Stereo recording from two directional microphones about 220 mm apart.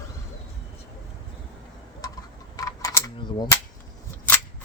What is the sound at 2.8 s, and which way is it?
Cap gun, 20° left (ahead or behind).